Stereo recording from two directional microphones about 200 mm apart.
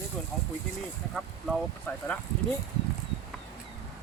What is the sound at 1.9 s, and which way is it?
Speech, 10° left (ahead or behind).